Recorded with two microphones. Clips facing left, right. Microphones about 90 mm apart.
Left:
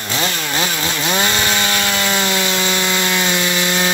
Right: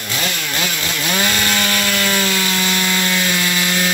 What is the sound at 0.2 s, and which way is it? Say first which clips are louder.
Chainsaw: left 3 dB; 25° left (ahead or behind).